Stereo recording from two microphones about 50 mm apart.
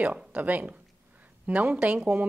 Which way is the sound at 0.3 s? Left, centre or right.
Right.